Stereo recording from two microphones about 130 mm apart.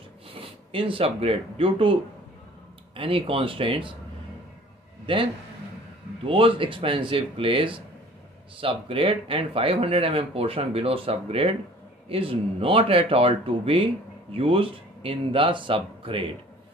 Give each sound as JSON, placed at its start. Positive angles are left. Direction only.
{"t": 0.3, "sound": "speech", "side_deg": -45}
{"t": 3.0, "sound": "speech", "side_deg": -45}
{"t": 5.0, "sound": "a man's voice", "side_deg": -40}